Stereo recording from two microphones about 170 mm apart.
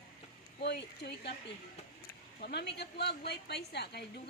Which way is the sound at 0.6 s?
85° left.